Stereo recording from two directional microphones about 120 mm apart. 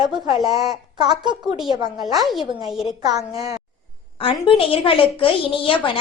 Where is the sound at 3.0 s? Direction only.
30° right (ahead or behind).